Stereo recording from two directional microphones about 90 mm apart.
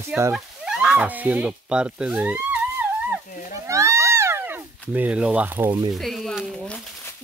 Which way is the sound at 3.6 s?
35° right (ahead or behind).